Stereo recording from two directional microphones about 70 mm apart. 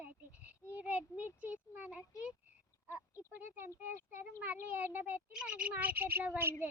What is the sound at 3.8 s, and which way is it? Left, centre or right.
A child's voice, right.